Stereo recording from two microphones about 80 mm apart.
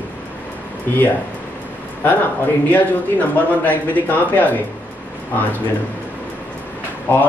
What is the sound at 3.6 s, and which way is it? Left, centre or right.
Speech, left.